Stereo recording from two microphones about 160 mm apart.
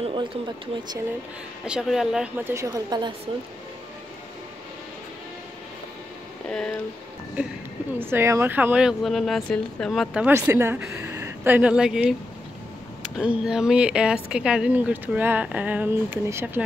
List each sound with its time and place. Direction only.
0.0 s a sound: 30° right (ahead or behind)
1.7 s speech: centre (ahead or behind)
2.4 s a woman's voice: 20° right (ahead or behind)
6.5 s speech: 5° left (ahead or behind)
7.4 s speech: 10° right (ahead or behind)
10.1 s a woman's voice: 15° right (ahead or behind)
13.2 s speech: 5° right (ahead or behind)